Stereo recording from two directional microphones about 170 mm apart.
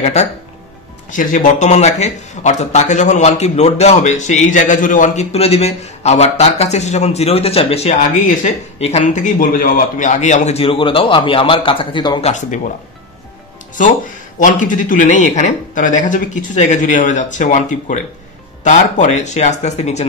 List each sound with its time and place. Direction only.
0.0 s speech: 40° left (ahead or behind)
12.3 s speech: 45° left (ahead or behind)
14.4 s speech: 50° left (ahead or behind)